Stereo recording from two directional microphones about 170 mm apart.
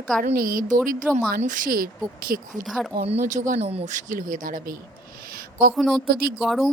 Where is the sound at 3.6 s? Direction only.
35° right (ahead or behind); by 4.8 s 55° right (ahead or behind).